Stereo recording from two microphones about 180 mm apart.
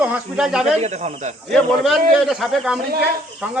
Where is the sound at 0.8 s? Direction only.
40° right (ahead or behind).